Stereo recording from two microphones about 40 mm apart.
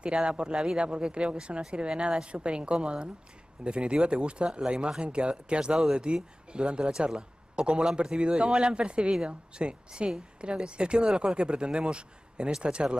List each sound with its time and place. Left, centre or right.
0.0 s a man's voice: right